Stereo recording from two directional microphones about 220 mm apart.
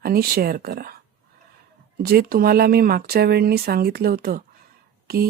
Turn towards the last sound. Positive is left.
turn(degrees=-45)  # may be behind; listen again after turning